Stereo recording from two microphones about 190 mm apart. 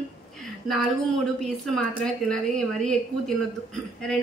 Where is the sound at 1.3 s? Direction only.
Centre (ahead or behind).